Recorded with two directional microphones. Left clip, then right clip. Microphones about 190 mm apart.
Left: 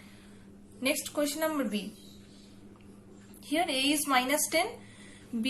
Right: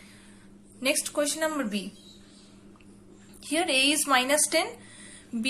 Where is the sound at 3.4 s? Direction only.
20° right (ahead or behind).